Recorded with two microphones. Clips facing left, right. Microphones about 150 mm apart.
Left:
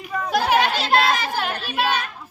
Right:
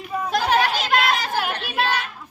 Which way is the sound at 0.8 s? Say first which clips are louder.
Left 2 dB; 30° left (ahead or behind).